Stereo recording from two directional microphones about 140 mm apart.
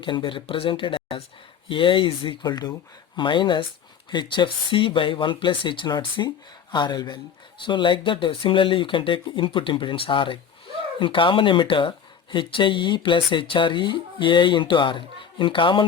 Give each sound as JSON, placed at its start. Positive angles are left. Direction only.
{"t": 0.0, "sound": "speech", "side_deg": 35}